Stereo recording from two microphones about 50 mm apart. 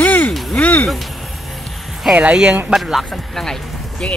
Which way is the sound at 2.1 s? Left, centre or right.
Centre.